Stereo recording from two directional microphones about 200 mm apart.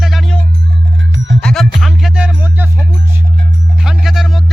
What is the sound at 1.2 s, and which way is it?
Music, 65° right (ahead or behind).